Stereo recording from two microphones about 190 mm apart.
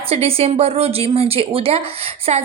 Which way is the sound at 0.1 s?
30° right (ahead or behind).